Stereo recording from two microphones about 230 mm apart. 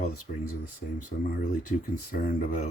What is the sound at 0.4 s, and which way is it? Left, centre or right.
Speech, left.